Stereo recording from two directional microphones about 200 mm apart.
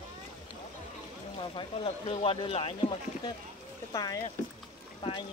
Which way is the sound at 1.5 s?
25° left (ahead or behind).